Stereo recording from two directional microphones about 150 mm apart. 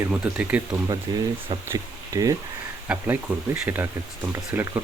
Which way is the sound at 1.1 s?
25° right (ahead or behind).